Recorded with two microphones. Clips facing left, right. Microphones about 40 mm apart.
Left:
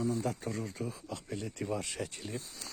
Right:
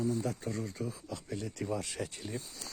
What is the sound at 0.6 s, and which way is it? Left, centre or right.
Speech, centre.